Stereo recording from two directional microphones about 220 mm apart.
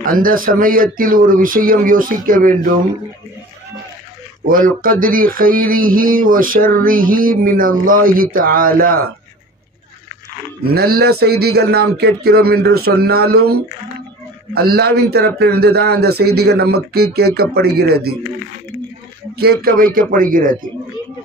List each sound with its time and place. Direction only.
0.0 s speech: 40° right (ahead or behind)
4.5 s speech: 40° right (ahead or behind)
10.6 s speech: 45° right (ahead or behind)
14.5 s speech: 45° right (ahead or behind)
19.3 s a man's voice: 45° right (ahead or behind)